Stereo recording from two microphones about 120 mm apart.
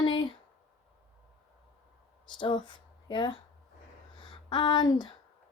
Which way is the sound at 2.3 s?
40° left (ahead or behind).